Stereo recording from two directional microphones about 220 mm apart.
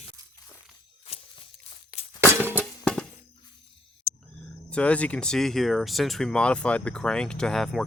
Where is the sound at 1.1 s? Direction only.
25° left (ahead or behind).